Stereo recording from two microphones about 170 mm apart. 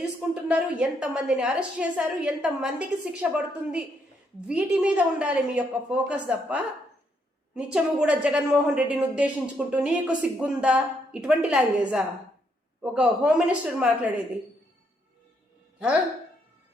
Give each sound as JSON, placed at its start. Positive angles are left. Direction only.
{"t": 0.0, "sound": "a woman's voice", "side_deg": -5}